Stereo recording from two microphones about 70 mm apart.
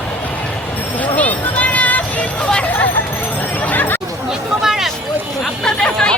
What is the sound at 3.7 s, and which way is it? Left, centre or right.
Chatter, left.